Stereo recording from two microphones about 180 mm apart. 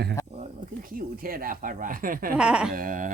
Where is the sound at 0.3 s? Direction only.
50° right (ahead or behind).